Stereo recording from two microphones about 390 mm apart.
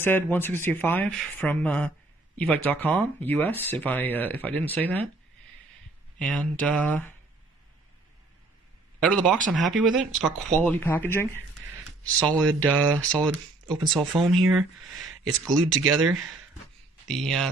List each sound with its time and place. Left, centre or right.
0.0 s speech: centre
6.1 s speech: centre
9.5 s speech: centre